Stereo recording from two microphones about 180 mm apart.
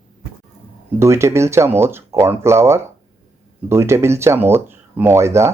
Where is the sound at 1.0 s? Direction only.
15° right (ahead or behind).